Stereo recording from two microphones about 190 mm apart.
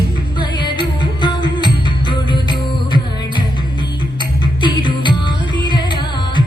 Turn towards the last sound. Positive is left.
turn(degrees=25)  # may be behind; listen again after turning